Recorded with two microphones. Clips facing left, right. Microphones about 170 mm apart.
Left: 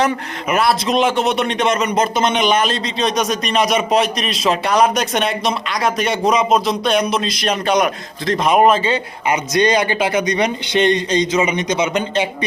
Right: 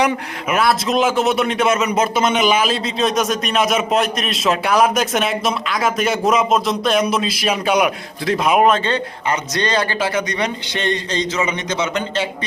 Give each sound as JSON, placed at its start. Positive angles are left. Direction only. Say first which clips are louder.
{"t": 0.4, "sound": "a man's voice", "louder": "left 1 dB", "side_deg": 0}